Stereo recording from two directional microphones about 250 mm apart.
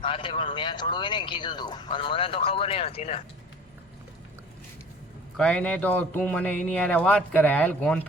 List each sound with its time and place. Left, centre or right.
0.0 s speech: centre
5.4 s a man's voice: centre